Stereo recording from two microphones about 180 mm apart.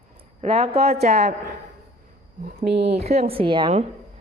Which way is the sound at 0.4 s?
30° right (ahead or behind).